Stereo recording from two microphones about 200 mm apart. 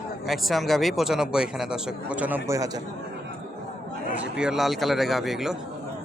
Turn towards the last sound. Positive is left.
turn(degrees=0)  # may be behind; listen again after turning